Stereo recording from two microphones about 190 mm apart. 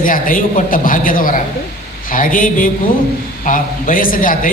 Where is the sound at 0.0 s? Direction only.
45° left (ahead or behind).